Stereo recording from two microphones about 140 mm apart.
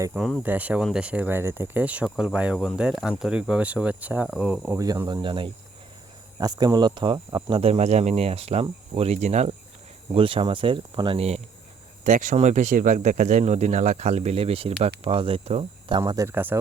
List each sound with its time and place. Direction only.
0.1 s speech: centre (ahead or behind)
0.4 s speech: 10° right (ahead or behind)
4.8 s speech: 25° right (ahead or behind)
7.6 s speech: 50° right (ahead or behind)
10.1 s speech: 40° right (ahead or behind)
12.0 s speech: 65° right (ahead or behind); by 15.6 s 45° right (ahead or behind)
15.9 s speech: 30° right (ahead or behind)
16.2 s speech: 15° right (ahead or behind)